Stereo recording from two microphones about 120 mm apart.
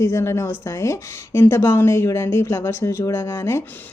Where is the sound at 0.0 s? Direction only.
25° left (ahead or behind).